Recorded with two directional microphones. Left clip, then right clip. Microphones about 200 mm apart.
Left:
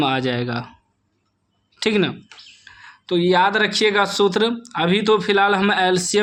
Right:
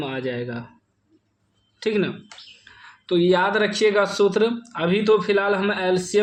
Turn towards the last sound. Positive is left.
turn(degrees=30)  # may be behind; listen again after turning